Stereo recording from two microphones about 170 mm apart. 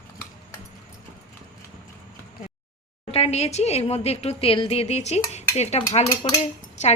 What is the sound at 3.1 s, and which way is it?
A woman's voice, 40° left (ahead or behind).